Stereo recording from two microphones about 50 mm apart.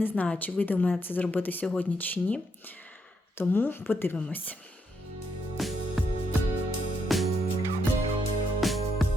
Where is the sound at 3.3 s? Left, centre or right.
Left.